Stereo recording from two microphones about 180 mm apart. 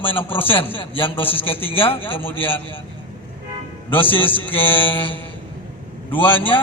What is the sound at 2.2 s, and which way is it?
Speech, 10° left (ahead or behind).